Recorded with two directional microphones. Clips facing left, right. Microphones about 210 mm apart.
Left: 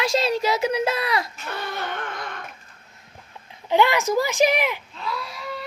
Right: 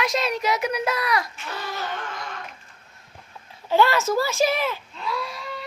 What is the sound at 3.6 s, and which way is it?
A child's voice, 15° left (ahead or behind).